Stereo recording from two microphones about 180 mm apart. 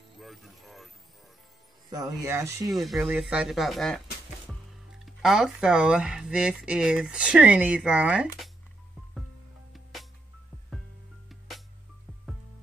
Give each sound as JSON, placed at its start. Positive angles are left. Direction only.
{"t": 0.2, "sound": "music", "side_deg": 0}
{"t": 1.9, "sound": "speech", "side_deg": -20}
{"t": 2.7, "sound": "speech", "side_deg": 0}
{"t": 11.2, "sound": "music", "side_deg": 0}